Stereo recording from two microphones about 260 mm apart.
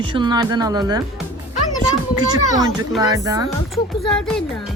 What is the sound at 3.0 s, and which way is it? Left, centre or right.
Speech, centre.